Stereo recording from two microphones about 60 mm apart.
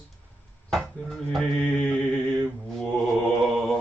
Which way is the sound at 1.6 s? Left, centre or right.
Centre.